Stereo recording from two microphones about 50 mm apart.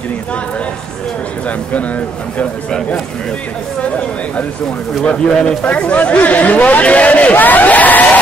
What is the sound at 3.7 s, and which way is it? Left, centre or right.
Speech, left.